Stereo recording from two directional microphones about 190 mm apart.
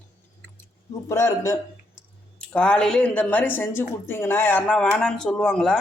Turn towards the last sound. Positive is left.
turn(degrees=5)  # may be behind; listen again after turning